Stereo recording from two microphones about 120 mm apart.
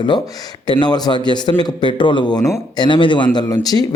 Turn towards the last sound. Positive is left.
turn(degrees=30)  # may be behind; listen again after turning